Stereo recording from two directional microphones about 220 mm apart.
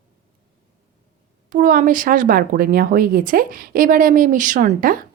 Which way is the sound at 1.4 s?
40° right (ahead or behind).